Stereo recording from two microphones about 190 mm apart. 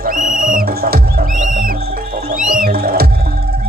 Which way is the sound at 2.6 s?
55° right (ahead or behind).